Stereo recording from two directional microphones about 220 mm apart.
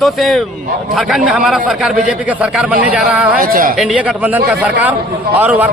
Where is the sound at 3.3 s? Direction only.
40° right (ahead or behind).